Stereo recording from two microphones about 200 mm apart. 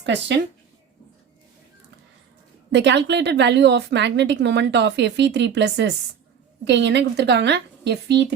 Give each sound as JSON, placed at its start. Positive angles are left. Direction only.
{"t": 0.0, "sound": "speech", "side_deg": -60}
{"t": 2.7, "sound": "speech", "side_deg": -60}